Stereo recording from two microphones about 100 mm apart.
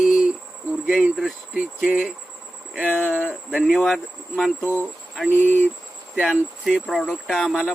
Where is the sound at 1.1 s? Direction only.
Centre (ahead or behind).